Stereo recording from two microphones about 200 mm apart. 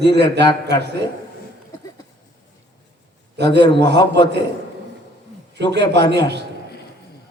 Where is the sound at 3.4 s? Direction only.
60° right (ahead or behind).